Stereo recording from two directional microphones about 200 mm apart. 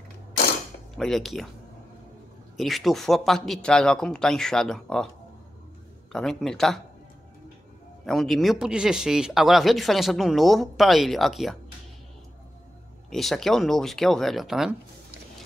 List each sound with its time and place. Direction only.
0.9 s speech: centre (ahead or behind)
2.5 s speech: centre (ahead or behind)
6.1 s speech: centre (ahead or behind)
8.0 s speech: centre (ahead or behind)
13.1 s speech: centre (ahead or behind)